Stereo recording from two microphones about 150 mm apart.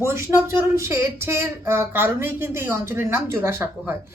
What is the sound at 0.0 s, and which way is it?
A woman's voice, 15° right (ahead or behind).